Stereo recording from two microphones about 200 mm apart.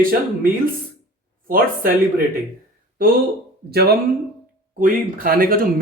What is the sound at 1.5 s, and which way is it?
Speech, 45° right (ahead or behind).